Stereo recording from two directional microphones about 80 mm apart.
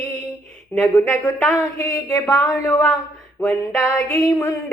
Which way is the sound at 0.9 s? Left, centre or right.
Left.